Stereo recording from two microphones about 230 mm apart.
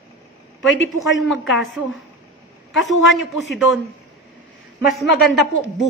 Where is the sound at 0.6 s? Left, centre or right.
Left.